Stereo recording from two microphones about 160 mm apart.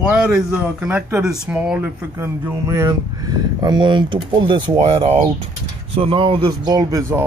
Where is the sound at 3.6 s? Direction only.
25° right (ahead or behind).